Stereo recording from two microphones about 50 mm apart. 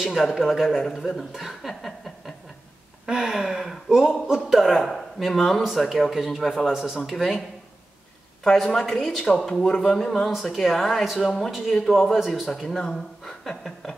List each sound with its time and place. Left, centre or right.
0.0 s speech: centre
3.1 s speech: centre
6.7 s speech: centre
8.5 s a woman's voice: centre
9.9 s a woman's voice: centre
12.6 s speech: centre